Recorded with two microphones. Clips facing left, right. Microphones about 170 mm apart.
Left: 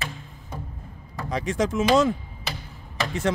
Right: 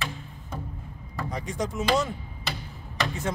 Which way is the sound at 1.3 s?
90° left.